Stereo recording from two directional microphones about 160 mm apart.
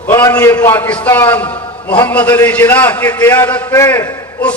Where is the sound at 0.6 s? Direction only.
15° left (ahead or behind).